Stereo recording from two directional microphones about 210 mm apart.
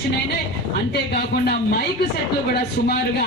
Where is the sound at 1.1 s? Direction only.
45° left (ahead or behind).